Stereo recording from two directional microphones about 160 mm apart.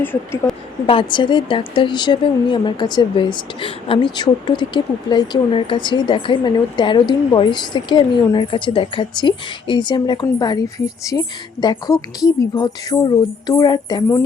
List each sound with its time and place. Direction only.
0.0 s a woman's voice: 15° left (ahead or behind)
0.9 s a woman's voice: 30° left (ahead or behind)